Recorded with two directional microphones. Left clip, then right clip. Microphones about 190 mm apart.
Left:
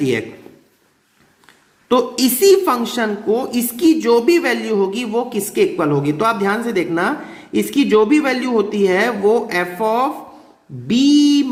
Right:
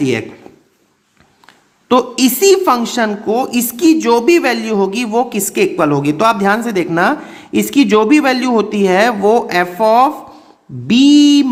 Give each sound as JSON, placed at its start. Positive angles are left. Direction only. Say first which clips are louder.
{"t": 0.0, "sound": "a woman's voice", "louder": "right 2 dB", "side_deg": -20}
{"t": 1.9, "sound": "a woman's voice", "louder": "right 3 dB", "side_deg": -20}